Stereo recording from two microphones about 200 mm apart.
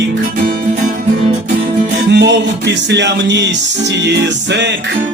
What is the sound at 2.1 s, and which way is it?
Music, 60° right (ahead or behind).